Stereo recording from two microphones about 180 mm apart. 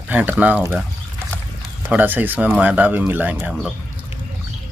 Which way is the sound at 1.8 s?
10° right (ahead or behind).